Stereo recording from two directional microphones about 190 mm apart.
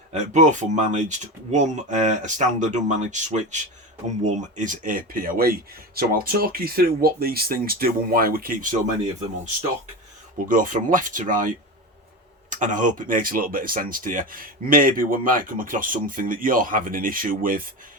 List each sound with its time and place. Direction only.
0.1 s speech: 40° right (ahead or behind)
10.5 s speech: 45° right (ahead or behind)